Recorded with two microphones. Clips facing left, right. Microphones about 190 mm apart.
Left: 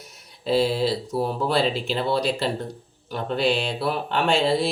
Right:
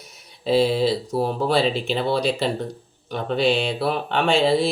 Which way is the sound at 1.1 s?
30° right (ahead or behind).